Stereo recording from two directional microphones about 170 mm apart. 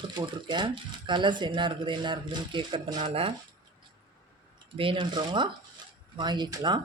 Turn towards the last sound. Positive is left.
turn(degrees=-25)  # may be behind; listen again after turning